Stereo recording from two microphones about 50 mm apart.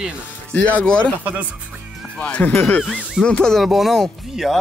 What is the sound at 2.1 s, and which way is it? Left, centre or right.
Speech, left.